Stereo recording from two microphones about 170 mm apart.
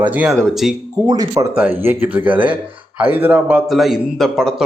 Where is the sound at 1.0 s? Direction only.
20° right (ahead or behind).